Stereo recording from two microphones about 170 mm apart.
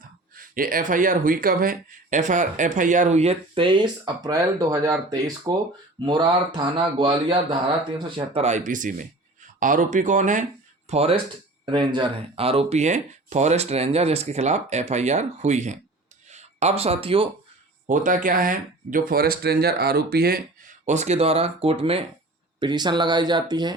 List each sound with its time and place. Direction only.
0.3 s speech: 55° right (ahead or behind); by 17.2 s 35° right (ahead or behind)
17.8 s speech: 50° right (ahead or behind); by 23.7 s 25° right (ahead or behind)